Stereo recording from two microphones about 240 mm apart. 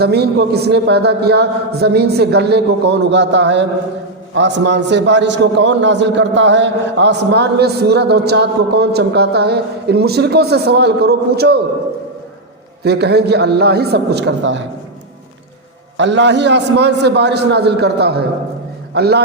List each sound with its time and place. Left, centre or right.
0.0 s a man's voice: right
12.8 s a man's voice: right
16.0 s a man's voice: right